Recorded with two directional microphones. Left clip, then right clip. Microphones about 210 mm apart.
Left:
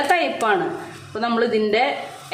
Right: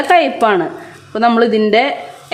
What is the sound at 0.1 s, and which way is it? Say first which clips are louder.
Speech: right 10 dB; 45° right (ahead or behind).